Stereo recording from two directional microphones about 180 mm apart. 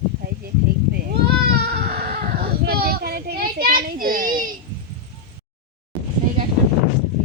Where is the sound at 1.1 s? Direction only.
60° right (ahead or behind).